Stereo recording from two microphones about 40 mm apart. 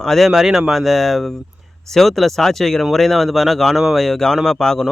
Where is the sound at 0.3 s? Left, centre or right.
Centre.